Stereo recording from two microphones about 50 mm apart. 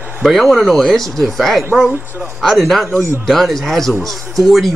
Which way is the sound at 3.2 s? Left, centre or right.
Centre.